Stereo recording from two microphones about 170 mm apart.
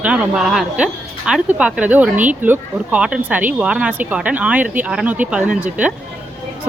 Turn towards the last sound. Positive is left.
turn(degrees=-5)  # may be behind; listen again after turning